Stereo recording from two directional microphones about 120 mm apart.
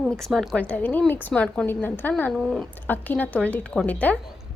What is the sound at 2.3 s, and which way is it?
Speech, centre (ahead or behind).